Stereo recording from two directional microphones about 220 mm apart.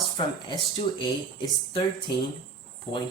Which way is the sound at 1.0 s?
20° left (ahead or behind).